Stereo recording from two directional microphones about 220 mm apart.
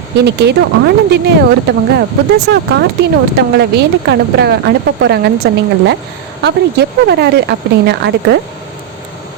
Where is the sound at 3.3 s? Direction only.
50° right (ahead or behind).